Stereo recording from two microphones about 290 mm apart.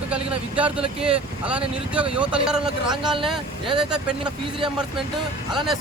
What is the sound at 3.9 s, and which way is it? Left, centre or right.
Speech, centre.